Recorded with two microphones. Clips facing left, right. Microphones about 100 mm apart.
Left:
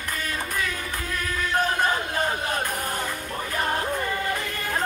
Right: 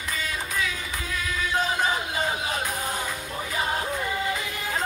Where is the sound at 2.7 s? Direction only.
60° left (ahead or behind).